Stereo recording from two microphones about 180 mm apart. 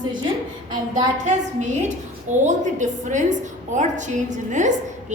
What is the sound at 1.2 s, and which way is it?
A woman's voice, 40° right (ahead or behind).